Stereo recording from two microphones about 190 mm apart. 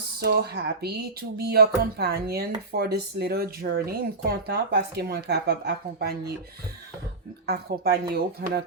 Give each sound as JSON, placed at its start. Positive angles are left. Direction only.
{"t": 0.2, "sound": "speech", "side_deg": -55}
{"t": 7.4, "sound": "speech", "side_deg": -55}